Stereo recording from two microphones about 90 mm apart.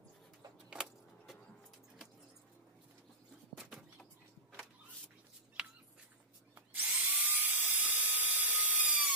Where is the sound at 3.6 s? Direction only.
5° right (ahead or behind).